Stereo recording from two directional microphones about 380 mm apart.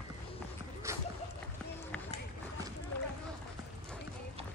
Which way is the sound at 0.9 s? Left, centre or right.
Centre.